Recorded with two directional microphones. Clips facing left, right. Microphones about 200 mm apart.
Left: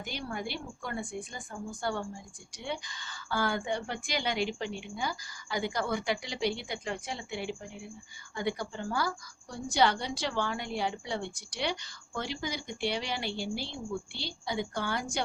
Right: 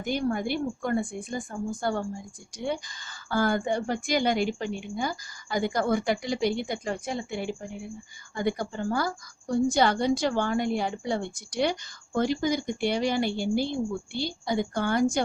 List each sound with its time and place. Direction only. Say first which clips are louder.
0.0 s a woman's voice: right 10 dB; 50° right (ahead or behind)